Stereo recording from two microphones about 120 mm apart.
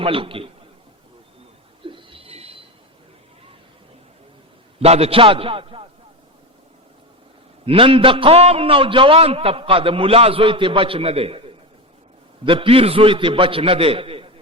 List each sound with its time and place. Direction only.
0.0 s a man's voice: 50° right (ahead or behind)
1.8 s a sound: 45° right (ahead or behind)
4.8 s a man's voice: 55° right (ahead or behind)
7.6 s a man's voice: 50° right (ahead or behind)
12.5 s a man's voice: 50° right (ahead or behind)